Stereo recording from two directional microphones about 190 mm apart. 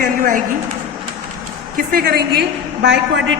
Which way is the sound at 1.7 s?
50° right (ahead or behind).